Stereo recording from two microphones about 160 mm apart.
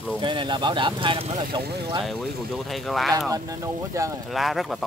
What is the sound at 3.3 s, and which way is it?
Speech, 20° right (ahead or behind).